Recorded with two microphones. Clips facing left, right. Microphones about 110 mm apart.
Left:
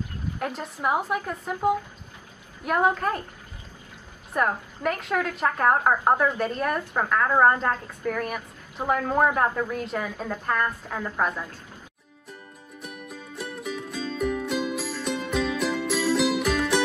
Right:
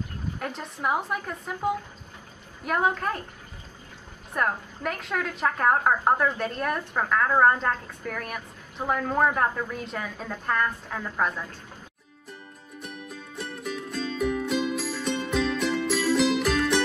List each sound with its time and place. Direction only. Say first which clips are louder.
0.4 s a woman's voice: left 3 dB; 5° left (ahead or behind)
4.3 s a woman's voice: left 2 dB; 5° left (ahead or behind)
12.8 s music: left 1 dB; 5° left (ahead or behind)